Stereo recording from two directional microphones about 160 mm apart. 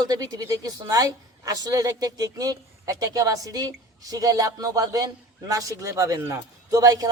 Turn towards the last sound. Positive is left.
turn(degrees=-20)  # may be behind; listen again after turning